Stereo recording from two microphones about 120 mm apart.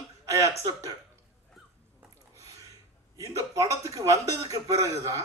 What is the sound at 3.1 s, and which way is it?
A man's voice, 25° right (ahead or behind).